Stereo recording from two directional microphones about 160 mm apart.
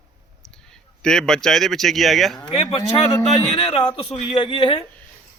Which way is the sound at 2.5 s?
30° left (ahead or behind).